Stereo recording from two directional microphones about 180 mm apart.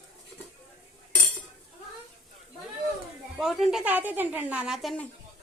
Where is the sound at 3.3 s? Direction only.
5° right (ahead or behind).